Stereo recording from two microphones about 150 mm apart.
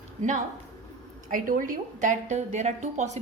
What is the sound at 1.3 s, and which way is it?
Speech, 65° right (ahead or behind).